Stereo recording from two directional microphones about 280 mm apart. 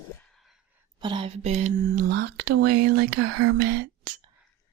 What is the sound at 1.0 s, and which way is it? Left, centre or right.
Speech, centre.